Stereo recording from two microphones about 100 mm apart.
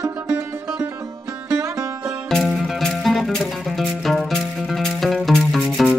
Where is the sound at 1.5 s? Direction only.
35° right (ahead or behind).